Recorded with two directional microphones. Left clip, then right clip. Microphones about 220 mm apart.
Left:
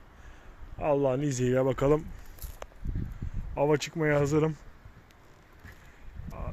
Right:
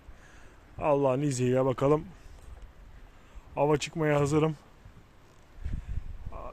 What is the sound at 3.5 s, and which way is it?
Speech, centre (ahead or behind).